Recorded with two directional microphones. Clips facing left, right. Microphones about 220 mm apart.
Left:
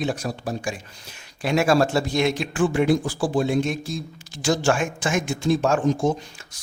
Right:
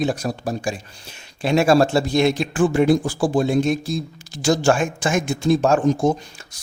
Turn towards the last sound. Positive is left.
turn(degrees=-40)  # may be behind; listen again after turning